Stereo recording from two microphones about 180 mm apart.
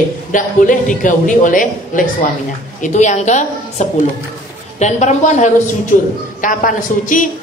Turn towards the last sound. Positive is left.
turn(degrees=50)  # may be behind; listen again after turning